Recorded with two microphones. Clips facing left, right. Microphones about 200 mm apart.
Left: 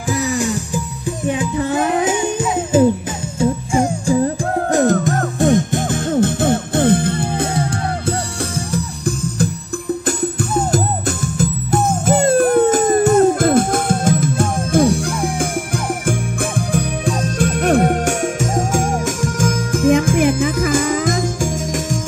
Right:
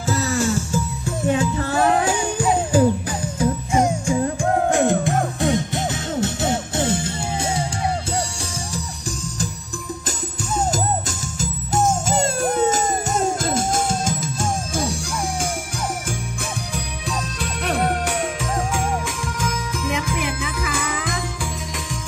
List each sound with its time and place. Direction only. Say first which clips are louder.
0.0 s music: left 2 dB; 15° left (ahead or behind); by 21.9 s 45° left (ahead or behind)